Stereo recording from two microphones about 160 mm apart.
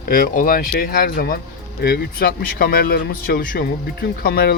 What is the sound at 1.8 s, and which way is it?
Speech, 75° left (ahead or behind).